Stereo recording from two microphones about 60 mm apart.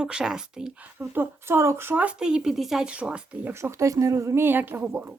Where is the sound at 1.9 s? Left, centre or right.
Right.